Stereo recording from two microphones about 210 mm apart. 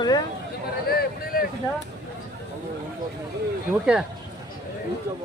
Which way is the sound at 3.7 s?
5° right (ahead or behind).